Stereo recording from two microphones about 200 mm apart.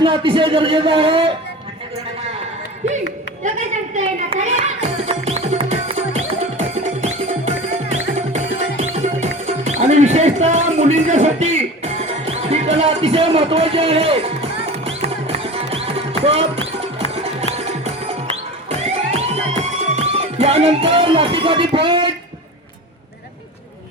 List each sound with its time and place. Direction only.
0.0 s speech: 25° right (ahead or behind)
3.4 s a sound: 40° right (ahead or behind)
3.9 s music: 35° right (ahead or behind)